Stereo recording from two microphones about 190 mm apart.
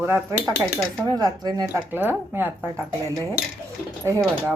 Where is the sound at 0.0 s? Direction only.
15° right (ahead or behind).